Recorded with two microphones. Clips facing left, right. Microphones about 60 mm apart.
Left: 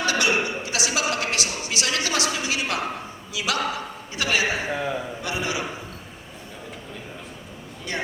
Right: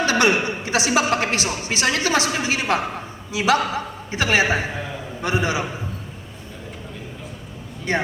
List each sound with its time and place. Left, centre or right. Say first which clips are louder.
0.0 s a man's voice: right 4 dB; right
7.9 s a man's voice: right 7 dB; right